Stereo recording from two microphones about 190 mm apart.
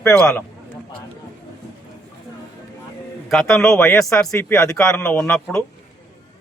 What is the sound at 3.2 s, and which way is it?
A man's voice, centre (ahead or behind).